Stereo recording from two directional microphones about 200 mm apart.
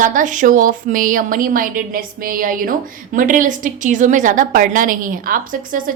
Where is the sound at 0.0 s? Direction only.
40° right (ahead or behind).